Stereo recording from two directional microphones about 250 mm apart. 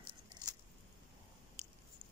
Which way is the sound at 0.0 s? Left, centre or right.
Centre.